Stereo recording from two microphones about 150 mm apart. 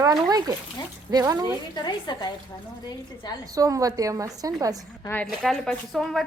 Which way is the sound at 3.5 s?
25° right (ahead or behind).